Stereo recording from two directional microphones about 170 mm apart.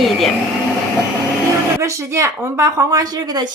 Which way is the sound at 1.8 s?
15° right (ahead or behind).